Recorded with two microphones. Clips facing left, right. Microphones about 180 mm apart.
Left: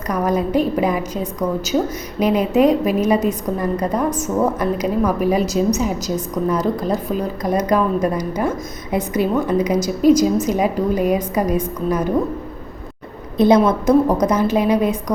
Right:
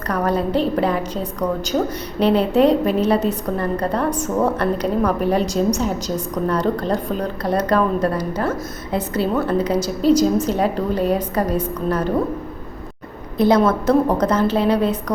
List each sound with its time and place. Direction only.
0.1 s a woman's voice: 10° left (ahead or behind)
13.3 s a woman's voice: 20° left (ahead or behind)